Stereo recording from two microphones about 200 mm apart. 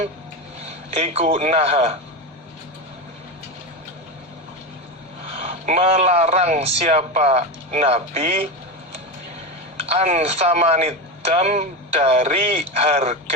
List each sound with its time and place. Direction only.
0.9 s a man's voice: 30° right (ahead or behind)
5.4 s a man's voice: 35° right (ahead or behind)
9.8 s a man's voice: 35° right (ahead or behind)